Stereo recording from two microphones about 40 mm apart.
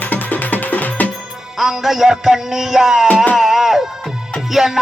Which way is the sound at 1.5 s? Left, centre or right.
Centre.